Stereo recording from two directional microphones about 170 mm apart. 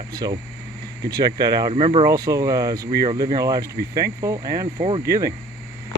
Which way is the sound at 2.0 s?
20° right (ahead or behind).